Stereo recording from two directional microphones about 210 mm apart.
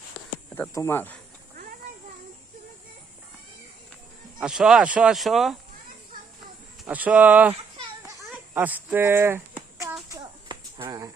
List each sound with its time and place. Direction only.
0.5 s speech: 10° left (ahead or behind)
4.4 s speech: 5° right (ahead or behind)
6.8 s speech: 5° right (ahead or behind)
10.1 s a sound: 20° right (ahead or behind)